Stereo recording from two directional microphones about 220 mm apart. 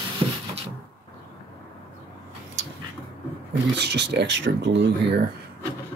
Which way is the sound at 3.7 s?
50° right (ahead or behind).